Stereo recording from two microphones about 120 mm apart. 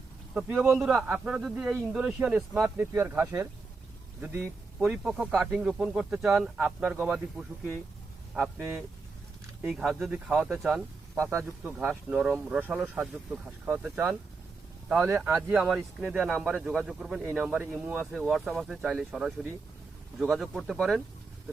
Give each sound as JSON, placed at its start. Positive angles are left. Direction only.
{"t": 0.3, "sound": "speech", "side_deg": -15}
{"t": 0.7, "sound": "speech", "side_deg": 0}
{"t": 4.8, "sound": "speech", "side_deg": -5}
{"t": 11.3, "sound": "speech", "side_deg": -20}
{"t": 12.1, "sound": "speech", "side_deg": -5}
{"t": 15.7, "sound": "speech", "side_deg": -5}